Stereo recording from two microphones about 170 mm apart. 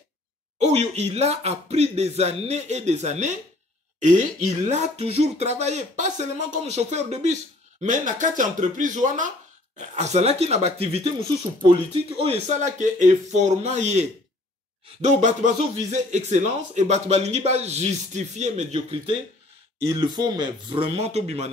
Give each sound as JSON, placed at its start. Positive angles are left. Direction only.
{"t": 0.6, "sound": "speech", "side_deg": -40}
{"t": 15.0, "sound": "speech", "side_deg": -45}
{"t": 19.8, "sound": "speech", "side_deg": -20}
{"t": 21.0, "sound": "speech", "side_deg": -40}